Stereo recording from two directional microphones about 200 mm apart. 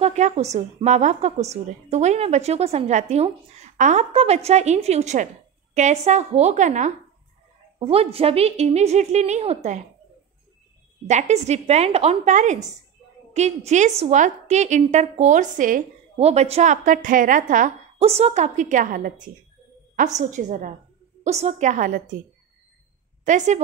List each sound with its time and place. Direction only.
0.0 s a woman's voice: 35° right (ahead or behind)
11.1 s a woman's voice: 35° right (ahead or behind)
23.2 s a woman's voice: 35° right (ahead or behind)